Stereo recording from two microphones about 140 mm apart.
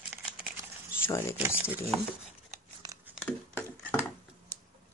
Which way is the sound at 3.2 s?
15° left (ahead or behind).